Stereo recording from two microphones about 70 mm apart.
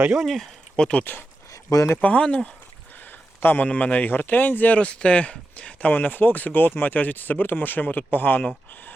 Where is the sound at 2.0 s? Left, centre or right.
Centre.